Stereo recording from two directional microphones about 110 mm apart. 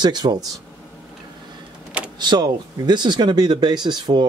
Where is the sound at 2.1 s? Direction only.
40° right (ahead or behind).